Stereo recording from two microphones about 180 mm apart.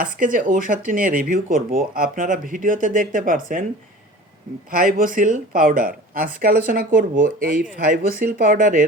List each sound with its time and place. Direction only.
0.0 s speech: 45° right (ahead or behind)
4.7 s speech: 50° right (ahead or behind)